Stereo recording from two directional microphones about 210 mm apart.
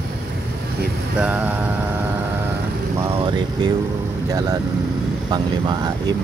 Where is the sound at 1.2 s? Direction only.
10° right (ahead or behind).